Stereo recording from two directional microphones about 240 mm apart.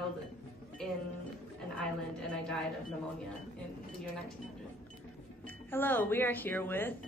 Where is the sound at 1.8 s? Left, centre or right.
Centre.